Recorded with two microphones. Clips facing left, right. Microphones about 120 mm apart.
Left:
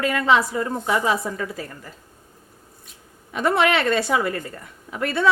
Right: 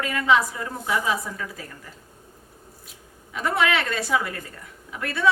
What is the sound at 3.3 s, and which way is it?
Speech, 25° left (ahead or behind).